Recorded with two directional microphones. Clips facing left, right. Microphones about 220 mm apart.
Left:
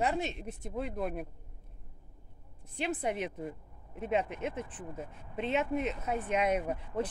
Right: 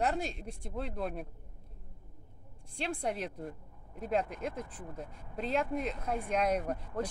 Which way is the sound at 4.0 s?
5° left (ahead or behind).